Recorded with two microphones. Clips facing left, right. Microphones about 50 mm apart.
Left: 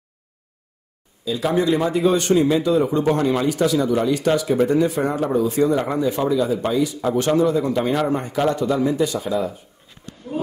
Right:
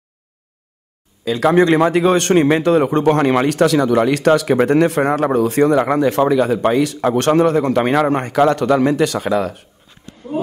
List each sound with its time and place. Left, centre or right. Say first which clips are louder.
1.2 s a man's voice: right 6 dB; right